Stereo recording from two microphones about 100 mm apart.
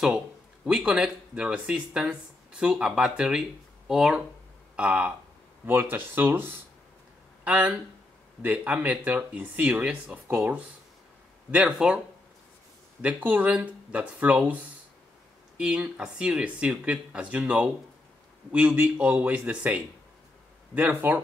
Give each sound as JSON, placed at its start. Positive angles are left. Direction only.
{"t": 0.7, "sound": "speech", "side_deg": -10}
{"t": 4.7, "sound": "speech", "side_deg": -15}
{"t": 13.0, "sound": "speech", "side_deg": -15}